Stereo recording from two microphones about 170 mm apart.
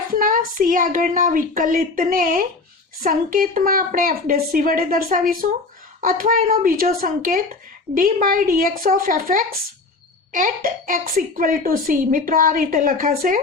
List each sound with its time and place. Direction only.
0.1 s a woman's voice: 55° right (ahead or behind)